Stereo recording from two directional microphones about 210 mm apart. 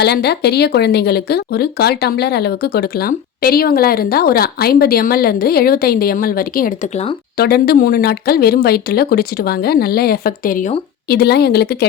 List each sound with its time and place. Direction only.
0.0 s a woman's voice: 50° left (ahead or behind); by 7.2 s 30° left (ahead or behind)
7.3 s a woman's voice: 45° left (ahead or behind)